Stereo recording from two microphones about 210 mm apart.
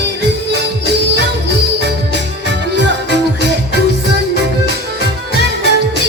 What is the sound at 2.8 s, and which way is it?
Music, 55° right (ahead or behind).